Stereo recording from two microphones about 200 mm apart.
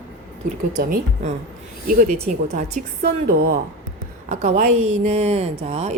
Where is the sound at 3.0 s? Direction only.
50° right (ahead or behind).